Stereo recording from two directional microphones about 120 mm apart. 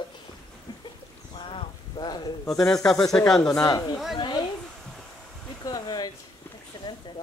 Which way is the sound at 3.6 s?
30° left (ahead or behind).